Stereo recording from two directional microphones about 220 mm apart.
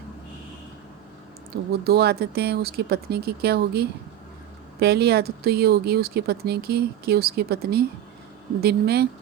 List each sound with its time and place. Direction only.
1.8 s speech: 45° right (ahead or behind)